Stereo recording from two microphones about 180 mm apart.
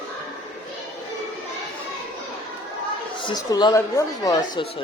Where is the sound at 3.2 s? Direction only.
25° left (ahead or behind).